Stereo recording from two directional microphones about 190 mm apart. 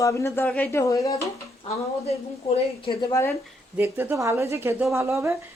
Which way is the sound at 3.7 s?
10° right (ahead or behind).